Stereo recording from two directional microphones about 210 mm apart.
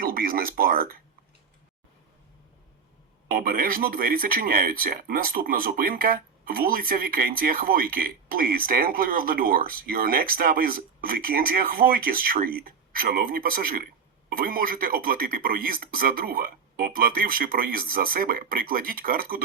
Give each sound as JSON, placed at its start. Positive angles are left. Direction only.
{"t": 0.0, "sound": "speech", "side_deg": -45}
{"t": 3.2, "sound": "speech", "side_deg": -45}